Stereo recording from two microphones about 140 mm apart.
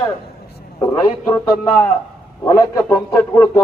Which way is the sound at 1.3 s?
15° left (ahead or behind).